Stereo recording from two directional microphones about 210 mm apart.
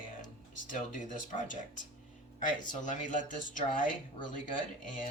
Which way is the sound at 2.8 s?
35° left (ahead or behind).